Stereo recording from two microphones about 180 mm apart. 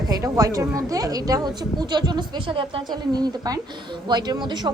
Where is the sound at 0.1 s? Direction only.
20° right (ahead or behind).